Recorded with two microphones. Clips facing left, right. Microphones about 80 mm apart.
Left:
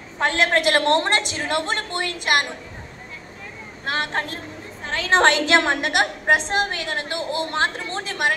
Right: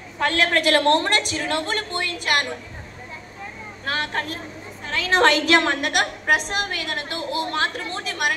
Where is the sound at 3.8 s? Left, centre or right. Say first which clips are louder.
Left 1 dB; left.